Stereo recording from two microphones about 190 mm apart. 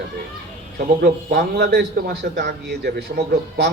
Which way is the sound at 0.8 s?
60° right (ahead or behind).